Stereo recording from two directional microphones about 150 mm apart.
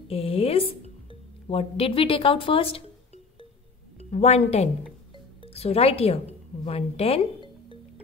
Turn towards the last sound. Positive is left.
turn(degrees=40)  # may be behind; listen again after turning